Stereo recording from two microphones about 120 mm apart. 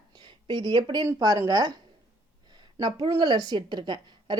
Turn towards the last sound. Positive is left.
turn(degrees=-40)  # may be behind; listen again after turning